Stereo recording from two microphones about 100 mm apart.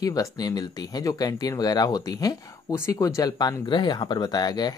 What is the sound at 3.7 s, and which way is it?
Speech, 50° left (ahead or behind).